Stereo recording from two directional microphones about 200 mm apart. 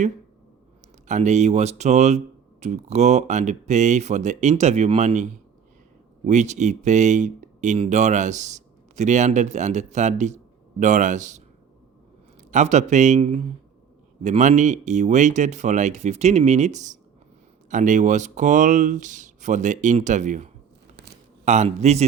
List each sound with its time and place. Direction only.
1.0 s speech: 35° right (ahead or behind)
12.5 s speech: 35° right (ahead or behind)